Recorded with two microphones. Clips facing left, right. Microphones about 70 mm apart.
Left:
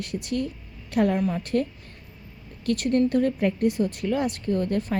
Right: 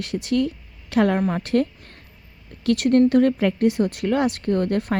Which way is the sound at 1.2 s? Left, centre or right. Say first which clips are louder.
Right 3 dB; right.